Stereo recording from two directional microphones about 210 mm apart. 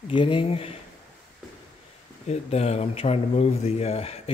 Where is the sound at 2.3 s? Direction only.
30° left (ahead or behind).